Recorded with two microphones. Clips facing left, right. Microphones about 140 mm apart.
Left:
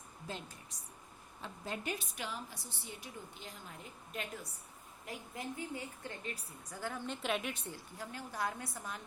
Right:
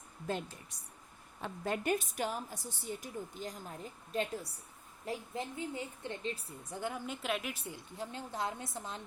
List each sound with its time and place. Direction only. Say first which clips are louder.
0.3 s a woman's voice: right 8 dB; 55° right (ahead or behind); by 7.0 s 20° right (ahead or behind)
7.0 s a woman's voice: even; 5° right (ahead or behind)
7.8 s a woman's voice: right 3 dB; 25° right (ahead or behind)